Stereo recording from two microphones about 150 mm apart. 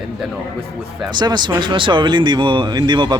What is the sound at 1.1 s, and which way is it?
Speech, 30° right (ahead or behind).